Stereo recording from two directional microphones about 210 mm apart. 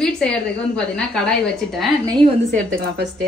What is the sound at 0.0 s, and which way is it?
A woman's voice, 5° left (ahead or behind).